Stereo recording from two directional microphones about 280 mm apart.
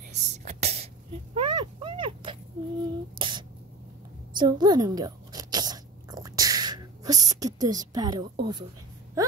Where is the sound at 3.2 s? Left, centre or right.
Centre.